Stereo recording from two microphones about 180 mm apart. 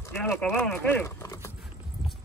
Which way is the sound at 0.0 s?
10° left (ahead or behind).